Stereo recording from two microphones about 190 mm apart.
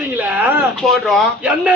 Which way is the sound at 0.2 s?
10° right (ahead or behind).